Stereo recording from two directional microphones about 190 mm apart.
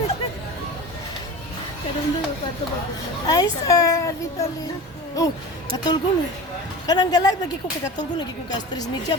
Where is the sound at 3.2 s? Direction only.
20° left (ahead or behind).